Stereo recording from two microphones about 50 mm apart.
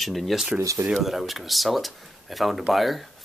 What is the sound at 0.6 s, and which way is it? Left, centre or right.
Speech, right.